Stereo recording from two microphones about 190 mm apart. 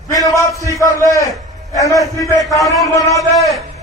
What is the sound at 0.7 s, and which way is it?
A man's voice, 15° left (ahead or behind).